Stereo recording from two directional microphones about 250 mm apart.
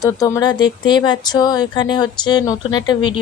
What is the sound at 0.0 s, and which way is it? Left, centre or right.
A woman's voice, centre.